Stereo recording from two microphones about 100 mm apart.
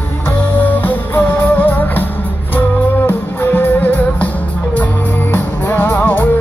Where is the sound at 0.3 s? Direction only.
20° left (ahead or behind).